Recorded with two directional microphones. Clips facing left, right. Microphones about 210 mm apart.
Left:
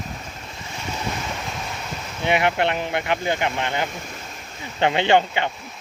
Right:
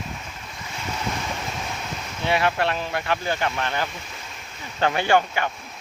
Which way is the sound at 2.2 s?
20° left (ahead or behind).